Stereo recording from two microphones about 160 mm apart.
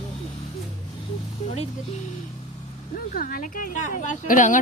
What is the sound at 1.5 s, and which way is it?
Speech, 45° left (ahead or behind).